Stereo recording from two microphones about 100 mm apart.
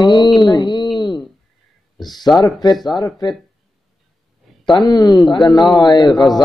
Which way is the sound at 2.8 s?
45° left (ahead or behind).